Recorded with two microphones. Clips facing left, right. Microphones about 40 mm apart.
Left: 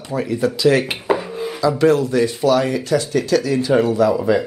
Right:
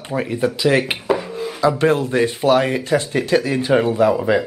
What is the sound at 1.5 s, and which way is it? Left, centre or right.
Speech, right.